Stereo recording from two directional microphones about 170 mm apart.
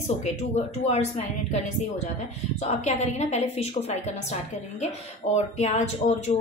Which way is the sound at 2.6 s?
40° left (ahead or behind).